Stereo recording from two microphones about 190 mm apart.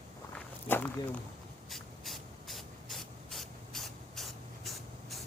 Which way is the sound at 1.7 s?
Centre (ahead or behind).